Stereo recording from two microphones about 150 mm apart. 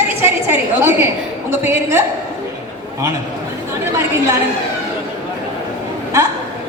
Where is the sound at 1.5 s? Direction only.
15° right (ahead or behind).